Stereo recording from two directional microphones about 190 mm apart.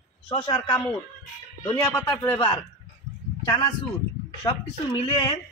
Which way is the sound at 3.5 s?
20° left (ahead or behind).